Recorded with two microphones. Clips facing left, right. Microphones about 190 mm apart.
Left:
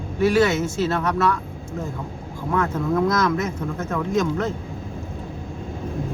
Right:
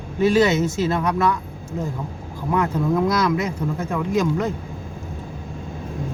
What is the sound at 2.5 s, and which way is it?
Speech, 15° right (ahead or behind).